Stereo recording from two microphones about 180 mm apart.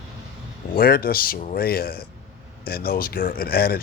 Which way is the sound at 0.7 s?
55° left (ahead or behind).